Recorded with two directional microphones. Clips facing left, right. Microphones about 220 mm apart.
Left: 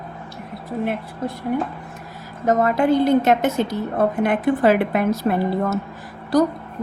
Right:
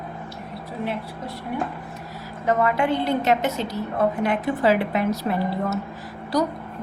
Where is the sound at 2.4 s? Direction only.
40° left (ahead or behind).